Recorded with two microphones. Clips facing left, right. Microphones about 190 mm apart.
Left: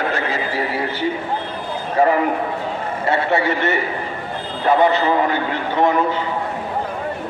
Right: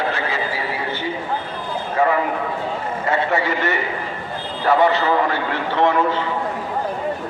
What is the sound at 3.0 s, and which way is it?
A man's voice, 25° left (ahead or behind).